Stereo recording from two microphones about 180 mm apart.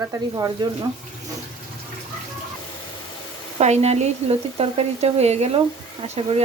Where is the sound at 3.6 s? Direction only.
35° right (ahead or behind).